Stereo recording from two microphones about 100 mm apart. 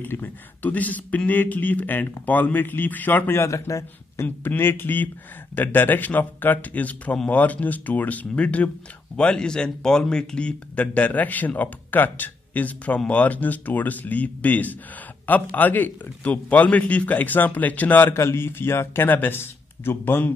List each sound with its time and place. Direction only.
0.0 s a man's voice: 20° left (ahead or behind)